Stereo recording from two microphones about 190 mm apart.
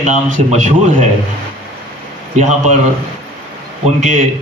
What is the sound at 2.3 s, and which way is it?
Speech, 40° right (ahead or behind).